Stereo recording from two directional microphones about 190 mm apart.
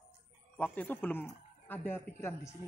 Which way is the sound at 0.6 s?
10° left (ahead or behind).